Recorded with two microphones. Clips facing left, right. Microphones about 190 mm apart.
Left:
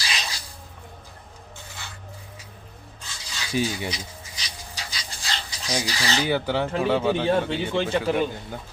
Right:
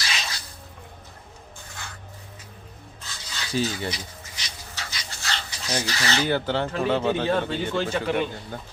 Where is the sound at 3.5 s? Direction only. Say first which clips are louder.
Left 1 dB; 10° left (ahead or behind).